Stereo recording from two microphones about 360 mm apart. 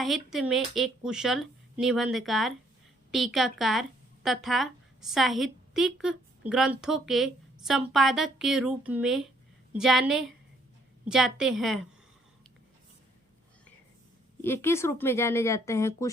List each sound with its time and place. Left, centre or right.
0.0 s speech: centre
14.4 s speech: centre